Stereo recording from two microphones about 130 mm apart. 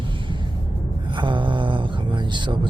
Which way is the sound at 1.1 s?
40° right (ahead or behind).